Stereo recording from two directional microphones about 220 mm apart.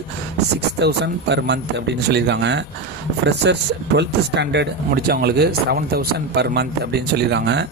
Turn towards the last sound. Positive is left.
turn(degrees=-50)  # may be behind; listen again after turning